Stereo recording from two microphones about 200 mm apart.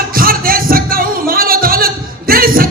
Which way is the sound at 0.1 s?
45° right (ahead or behind).